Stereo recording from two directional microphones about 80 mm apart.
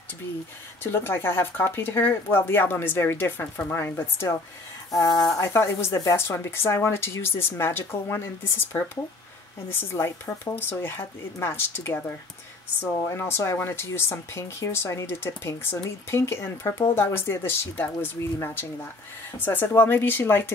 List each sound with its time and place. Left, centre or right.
0.8 s speech: left
4.9 s speech: left
5.4 s speech: left
9.7 s speech: left
13.1 s speech: left